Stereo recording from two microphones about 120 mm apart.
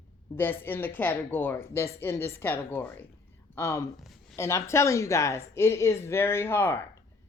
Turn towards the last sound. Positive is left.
turn(degrees=20)  # may be behind; listen again after turning